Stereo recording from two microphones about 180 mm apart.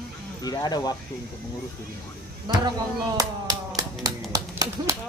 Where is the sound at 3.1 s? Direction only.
20° right (ahead or behind).